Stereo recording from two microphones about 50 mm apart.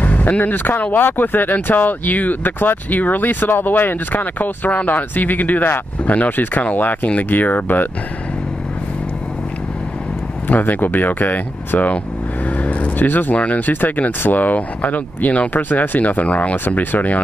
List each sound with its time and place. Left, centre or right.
0.0 s speech: left
10.5 s speech: left
12.4 s vehicle: left
13.4 s speech: left
16.5 s speech: left